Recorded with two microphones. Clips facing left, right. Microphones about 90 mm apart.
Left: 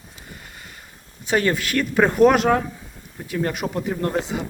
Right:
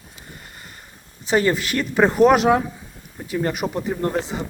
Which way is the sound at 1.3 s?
5° right (ahead or behind).